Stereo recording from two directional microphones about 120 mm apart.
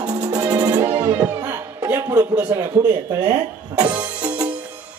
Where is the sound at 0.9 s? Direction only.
15° right (ahead or behind).